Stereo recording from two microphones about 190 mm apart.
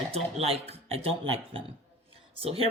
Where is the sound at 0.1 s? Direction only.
30° right (ahead or behind).